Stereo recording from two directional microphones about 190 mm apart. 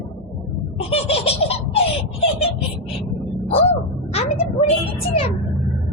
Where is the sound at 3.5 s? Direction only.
30° left (ahead or behind).